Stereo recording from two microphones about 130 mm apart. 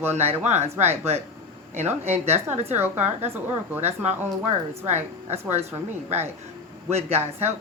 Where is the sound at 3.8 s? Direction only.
60° right (ahead or behind).